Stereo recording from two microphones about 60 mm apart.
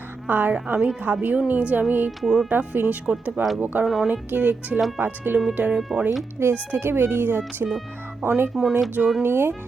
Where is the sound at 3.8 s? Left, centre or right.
Centre.